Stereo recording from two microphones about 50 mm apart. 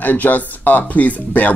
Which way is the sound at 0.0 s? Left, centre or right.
Left.